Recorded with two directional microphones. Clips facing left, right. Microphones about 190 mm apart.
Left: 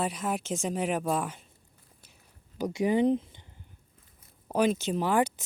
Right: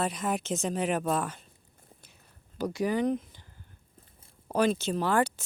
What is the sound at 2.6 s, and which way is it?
Speech, 20° left (ahead or behind).